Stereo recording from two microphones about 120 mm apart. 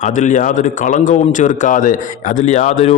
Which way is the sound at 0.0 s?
85° left.